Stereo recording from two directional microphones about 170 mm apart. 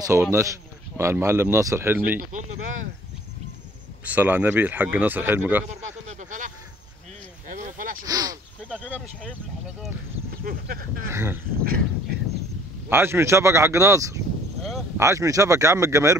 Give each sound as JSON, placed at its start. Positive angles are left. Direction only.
{"t": 0.0, "sound": "speech", "side_deg": -15}
{"t": 2.1, "sound": "speech", "side_deg": -50}
{"t": 4.0, "sound": "speech", "side_deg": -10}
{"t": 5.8, "sound": "a sound", "side_deg": -45}
{"t": 8.0, "sound": "a sound", "side_deg": -20}
{"t": 10.4, "sound": "speech", "side_deg": -55}
{"t": 11.1, "sound": "speech", "side_deg": -15}
{"t": 12.9, "sound": "speech", "side_deg": -15}